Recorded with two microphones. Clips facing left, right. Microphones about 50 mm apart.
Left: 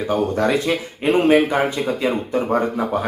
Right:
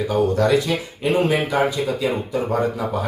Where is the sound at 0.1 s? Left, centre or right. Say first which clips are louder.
Right 1 dB; left.